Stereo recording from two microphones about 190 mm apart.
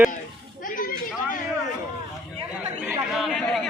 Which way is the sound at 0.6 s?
45° left (ahead or behind).